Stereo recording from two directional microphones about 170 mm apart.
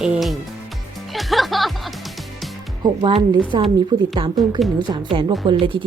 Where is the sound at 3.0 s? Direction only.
30° right (ahead or behind).